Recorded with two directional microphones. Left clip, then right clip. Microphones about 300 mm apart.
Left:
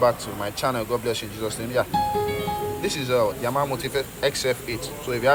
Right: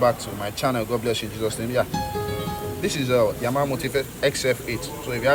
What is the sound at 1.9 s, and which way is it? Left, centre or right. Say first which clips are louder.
Music: left 5 dB; left.